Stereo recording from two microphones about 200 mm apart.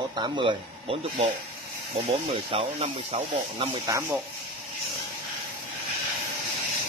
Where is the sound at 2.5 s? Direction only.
30° right (ahead or behind).